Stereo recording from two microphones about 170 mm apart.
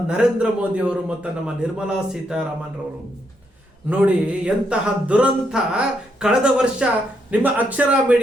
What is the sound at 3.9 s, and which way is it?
A man's voice, 10° right (ahead or behind).